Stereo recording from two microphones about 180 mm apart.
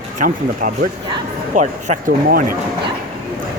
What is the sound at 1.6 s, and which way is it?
Speech, 40° right (ahead or behind).